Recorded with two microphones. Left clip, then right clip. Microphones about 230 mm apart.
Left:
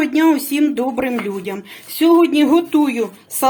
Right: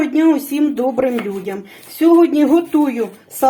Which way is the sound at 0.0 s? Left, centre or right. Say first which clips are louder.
Even; left.